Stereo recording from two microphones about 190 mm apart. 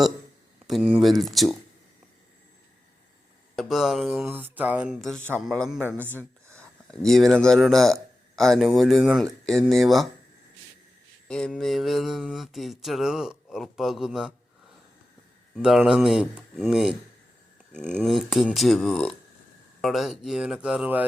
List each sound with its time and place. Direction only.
0.7 s speech: 5° right (ahead or behind)
3.5 s speech: centre (ahead or behind)
5.9 s a sound: 10° right (ahead or behind)
7.0 s speech: centre (ahead or behind)
11.3 s speech: 5° left (ahead or behind)
15.5 s speech: centre (ahead or behind)